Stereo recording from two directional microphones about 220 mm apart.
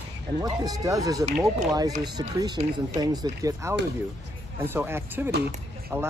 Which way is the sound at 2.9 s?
15° right (ahead or behind).